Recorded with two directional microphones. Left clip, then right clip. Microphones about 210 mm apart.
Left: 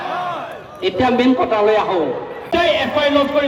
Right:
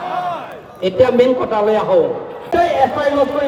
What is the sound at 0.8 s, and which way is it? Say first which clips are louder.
A man's voice: right 4 dB; 60° right (ahead or behind).